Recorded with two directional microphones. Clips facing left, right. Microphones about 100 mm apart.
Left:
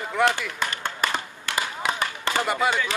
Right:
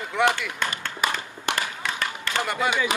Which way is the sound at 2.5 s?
5° left (ahead or behind).